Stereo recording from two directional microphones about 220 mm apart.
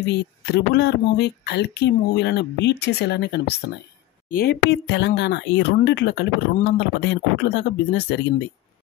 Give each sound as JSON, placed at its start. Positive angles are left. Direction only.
{"t": 0.0, "sound": "speech", "side_deg": 50}